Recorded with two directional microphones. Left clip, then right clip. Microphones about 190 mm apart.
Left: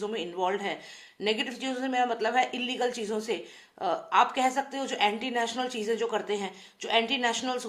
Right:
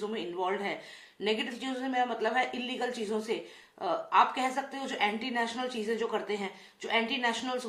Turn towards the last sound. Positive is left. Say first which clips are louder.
# left 3 dB
turn(degrees=40)  # may be behind; listen again after turning